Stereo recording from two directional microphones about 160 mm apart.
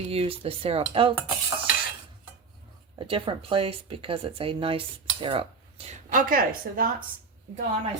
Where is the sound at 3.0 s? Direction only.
30° right (ahead or behind).